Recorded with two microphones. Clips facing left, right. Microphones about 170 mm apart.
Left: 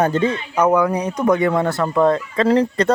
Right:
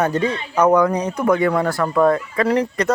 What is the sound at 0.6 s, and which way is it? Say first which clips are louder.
Speech: right 1 dB; 10° left (ahead or behind).